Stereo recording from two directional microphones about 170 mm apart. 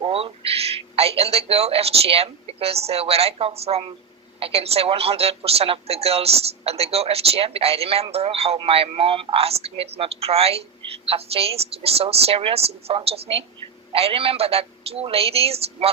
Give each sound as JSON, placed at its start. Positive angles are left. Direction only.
{"t": 0.0, "sound": "a man's voice", "side_deg": -35}